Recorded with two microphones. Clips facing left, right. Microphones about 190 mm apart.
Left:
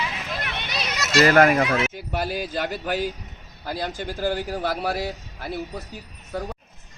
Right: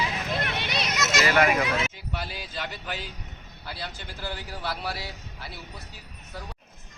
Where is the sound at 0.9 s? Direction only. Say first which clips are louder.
Left 7 dB; 30° left (ahead or behind).